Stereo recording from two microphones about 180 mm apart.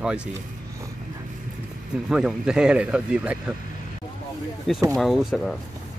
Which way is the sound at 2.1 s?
5° right (ahead or behind).